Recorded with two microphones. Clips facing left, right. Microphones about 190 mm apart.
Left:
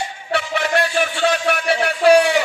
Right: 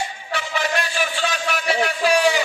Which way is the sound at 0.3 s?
65° left (ahead or behind).